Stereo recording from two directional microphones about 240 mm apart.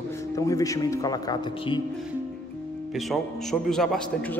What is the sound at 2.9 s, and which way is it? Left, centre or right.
Speech, centre.